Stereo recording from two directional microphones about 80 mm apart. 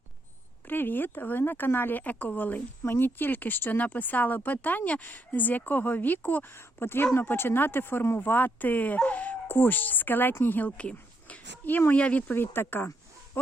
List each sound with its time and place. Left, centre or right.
0.7 s speech: left